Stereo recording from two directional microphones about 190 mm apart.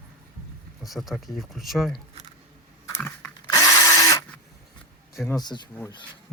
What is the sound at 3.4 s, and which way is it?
Drill, 15° left (ahead or behind).